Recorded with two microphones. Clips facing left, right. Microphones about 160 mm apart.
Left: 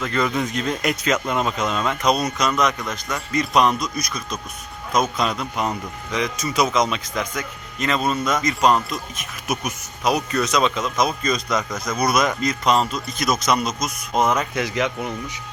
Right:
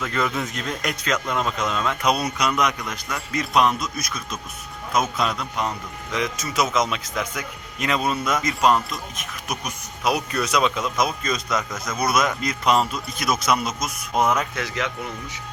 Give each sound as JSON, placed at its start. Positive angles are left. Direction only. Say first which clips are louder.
{"t": 0.0, "sound": "a man's voice", "louder": "left 3 dB", "side_deg": -5}
{"t": 2.0, "sound": "a man's voice", "louder": "left 3 dB", "side_deg": -10}
{"t": 14.5, "sound": "a man's voice", "louder": "left 5 dB", "side_deg": 15}